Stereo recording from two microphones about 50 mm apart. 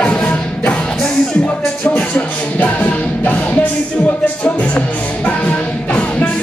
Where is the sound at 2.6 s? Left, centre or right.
Left.